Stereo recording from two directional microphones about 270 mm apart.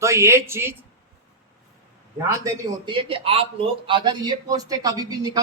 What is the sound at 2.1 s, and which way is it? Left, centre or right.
A man's voice, centre.